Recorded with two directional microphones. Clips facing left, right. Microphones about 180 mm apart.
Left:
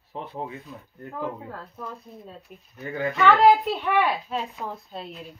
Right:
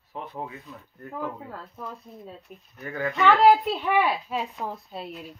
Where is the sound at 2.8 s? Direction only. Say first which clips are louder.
Left 2 dB; 25° left (ahead or behind).